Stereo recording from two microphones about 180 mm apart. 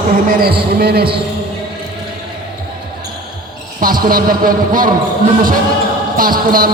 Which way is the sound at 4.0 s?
50° right (ahead or behind).